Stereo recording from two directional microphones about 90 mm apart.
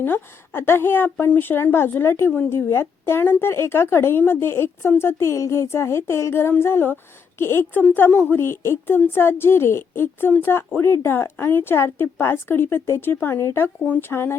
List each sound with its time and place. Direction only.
0.0 s speech: 25° left (ahead or behind)